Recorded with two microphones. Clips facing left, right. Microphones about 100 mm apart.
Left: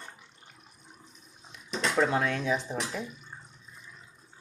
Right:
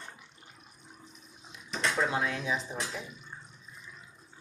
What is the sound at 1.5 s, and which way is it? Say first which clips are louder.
Speech: left 3 dB; 55° left (ahead or behind).